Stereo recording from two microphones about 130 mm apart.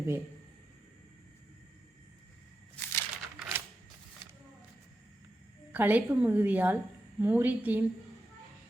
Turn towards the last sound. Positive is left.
turn(degrees=-15)  # may be behind; listen again after turning